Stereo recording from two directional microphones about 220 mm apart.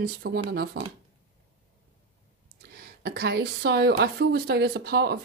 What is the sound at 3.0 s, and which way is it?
Speech, 45° right (ahead or behind).